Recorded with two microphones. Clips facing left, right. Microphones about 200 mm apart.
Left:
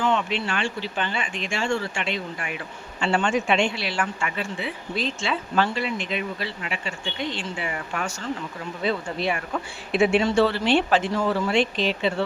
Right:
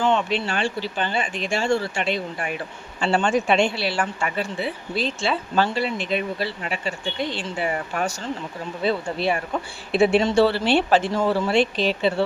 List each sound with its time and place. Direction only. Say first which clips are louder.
0.0 s a woman's voice: right 3 dB; 35° right (ahead or behind)
9.9 s a woman's voice: right 2 dB; 35° right (ahead or behind)